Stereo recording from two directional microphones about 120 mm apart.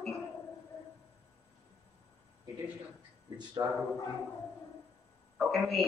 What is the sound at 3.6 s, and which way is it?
Speech, 30° right (ahead or behind).